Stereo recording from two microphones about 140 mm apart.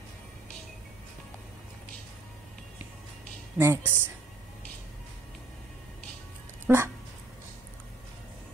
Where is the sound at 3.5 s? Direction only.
15° right (ahead or behind).